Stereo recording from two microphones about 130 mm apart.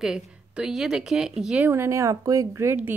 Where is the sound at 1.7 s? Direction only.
20° right (ahead or behind).